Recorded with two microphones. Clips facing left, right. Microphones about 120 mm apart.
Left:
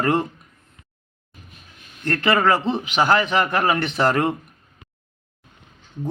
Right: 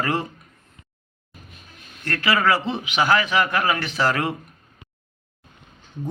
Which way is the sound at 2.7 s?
10° right (ahead or behind).